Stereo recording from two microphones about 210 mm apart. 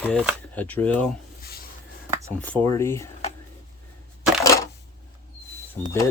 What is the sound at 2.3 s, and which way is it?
Speech, 5° left (ahead or behind).